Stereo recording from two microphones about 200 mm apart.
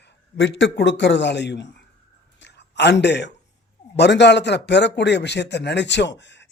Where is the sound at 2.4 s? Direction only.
60° left (ahead or behind).